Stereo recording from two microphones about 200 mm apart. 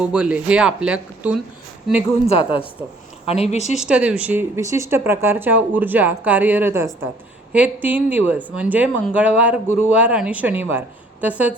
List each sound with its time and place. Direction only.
0.0 s speech: 5° right (ahead or behind)
2.3 s speech: 25° left (ahead or behind)
3.8 s speech: 5° right (ahead or behind)